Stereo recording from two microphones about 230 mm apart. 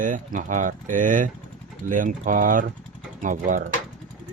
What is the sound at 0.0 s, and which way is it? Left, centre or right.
Speech, right.